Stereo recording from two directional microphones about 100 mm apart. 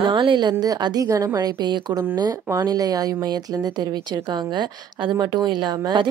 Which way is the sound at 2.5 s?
35° right (ahead or behind).